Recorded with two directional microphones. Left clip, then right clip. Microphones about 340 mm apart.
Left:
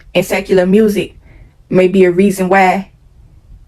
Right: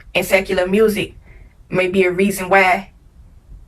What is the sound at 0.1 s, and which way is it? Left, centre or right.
Speech, centre.